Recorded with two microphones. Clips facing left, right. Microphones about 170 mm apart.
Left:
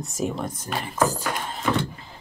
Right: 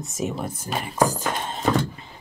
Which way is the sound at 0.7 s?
15° right (ahead or behind).